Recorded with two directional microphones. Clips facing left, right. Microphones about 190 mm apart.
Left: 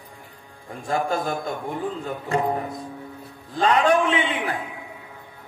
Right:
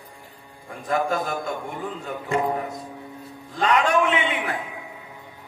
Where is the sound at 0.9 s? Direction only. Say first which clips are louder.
Even; 30° left (ahead or behind).